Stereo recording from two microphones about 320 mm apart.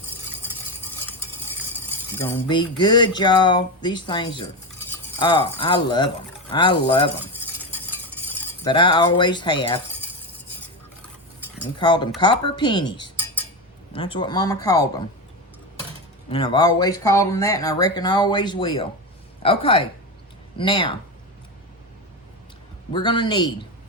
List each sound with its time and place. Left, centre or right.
2.1 s speech: centre
8.6 s speech: centre
11.8 s speech: centre
16.3 s speech: centre
22.9 s speech: centre